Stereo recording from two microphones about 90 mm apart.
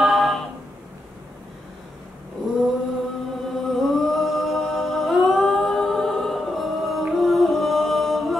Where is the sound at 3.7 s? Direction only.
Centre (ahead or behind).